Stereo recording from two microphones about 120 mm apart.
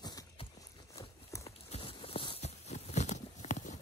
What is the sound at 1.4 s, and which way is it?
Clip-clop, 55° left (ahead or behind).